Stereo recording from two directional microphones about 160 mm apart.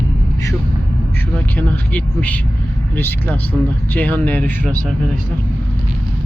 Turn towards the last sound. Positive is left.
turn(degrees=10)  # may be behind; listen again after turning